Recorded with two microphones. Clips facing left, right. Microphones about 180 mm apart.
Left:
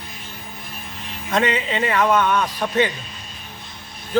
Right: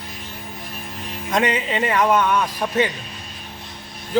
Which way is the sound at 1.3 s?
10° right (ahead or behind).